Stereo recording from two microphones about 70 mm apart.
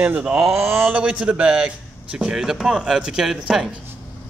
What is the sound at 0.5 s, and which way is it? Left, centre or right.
Speech, right.